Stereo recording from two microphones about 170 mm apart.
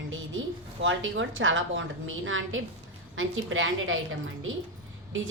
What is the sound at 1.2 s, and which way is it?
A woman's voice, 90° right.